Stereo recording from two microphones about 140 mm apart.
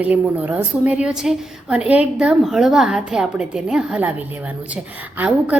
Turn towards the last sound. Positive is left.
turn(degrees=-15)  # may be behind; listen again after turning